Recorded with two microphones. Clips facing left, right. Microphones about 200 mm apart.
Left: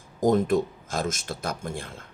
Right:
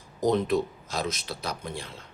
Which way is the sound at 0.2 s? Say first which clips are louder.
Left 3 dB; 50° left (ahead or behind).